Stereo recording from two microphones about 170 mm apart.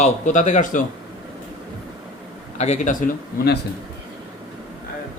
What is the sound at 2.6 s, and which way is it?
Speech, 45° left (ahead or behind).